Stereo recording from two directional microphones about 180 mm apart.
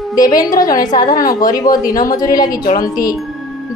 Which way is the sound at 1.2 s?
50° left (ahead or behind).